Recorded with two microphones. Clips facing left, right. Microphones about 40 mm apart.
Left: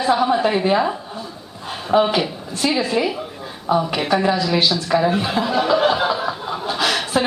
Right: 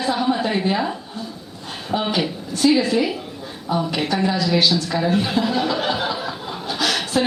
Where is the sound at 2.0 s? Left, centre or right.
Centre.